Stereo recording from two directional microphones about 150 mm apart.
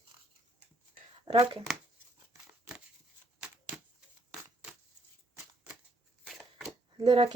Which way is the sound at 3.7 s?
5° right (ahead or behind).